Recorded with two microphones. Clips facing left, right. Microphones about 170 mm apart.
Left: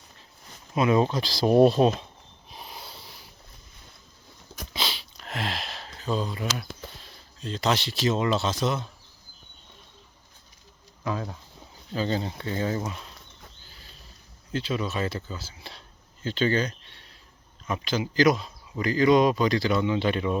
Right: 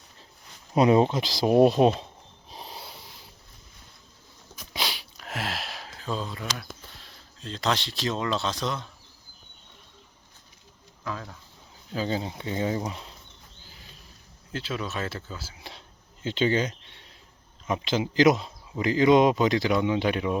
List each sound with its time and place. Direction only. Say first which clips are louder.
0.8 s speech: right 3 dB; 25° right (ahead or behind)
2.5 s a sound: right 1 dB; 30° right (ahead or behind)
2.9 s a sound: even; 20° right (ahead or behind)
4.7 s a sound: even; 10° right (ahead or behind); by 6.5 s 5° left (ahead or behind)
6.6 s speech: left 4 dB; centre (ahead or behind)
11.0 s speech: left 5 dB; 20° left (ahead or behind)
11.9 s speech: left 1 dB; 10° right (ahead or behind)
12.3 s speech: even; 20° right (ahead or behind)
14.5 s speech: left 3 dB; centre (ahead or behind)